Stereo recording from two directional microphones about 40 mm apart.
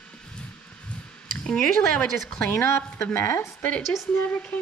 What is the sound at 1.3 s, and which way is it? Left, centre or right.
Speech, left.